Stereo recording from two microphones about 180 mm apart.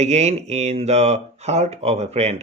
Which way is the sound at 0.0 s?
35° right (ahead or behind).